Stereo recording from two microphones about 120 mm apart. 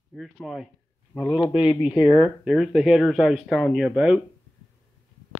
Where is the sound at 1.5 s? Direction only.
50° left (ahead or behind).